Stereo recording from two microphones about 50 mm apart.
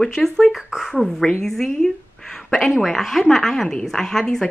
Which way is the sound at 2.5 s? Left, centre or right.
Centre.